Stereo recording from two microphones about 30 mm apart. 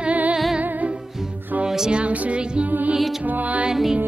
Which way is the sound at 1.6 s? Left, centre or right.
Centre.